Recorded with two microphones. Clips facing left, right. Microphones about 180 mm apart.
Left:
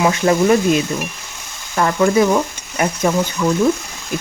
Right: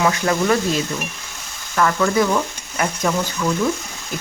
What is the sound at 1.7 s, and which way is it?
Stir, 25° left (ahead or behind).